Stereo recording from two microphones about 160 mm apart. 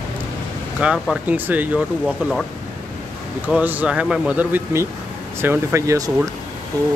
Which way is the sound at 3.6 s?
10° right (ahead or behind).